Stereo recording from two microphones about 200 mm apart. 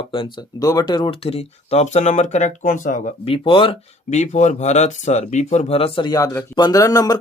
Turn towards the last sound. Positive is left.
turn(degrees=15)  # may be behind; listen again after turning